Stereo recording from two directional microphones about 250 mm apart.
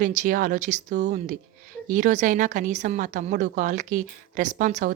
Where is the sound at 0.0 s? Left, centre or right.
Right.